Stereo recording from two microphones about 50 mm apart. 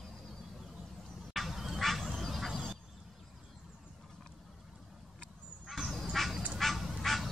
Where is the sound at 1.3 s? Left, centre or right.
Centre.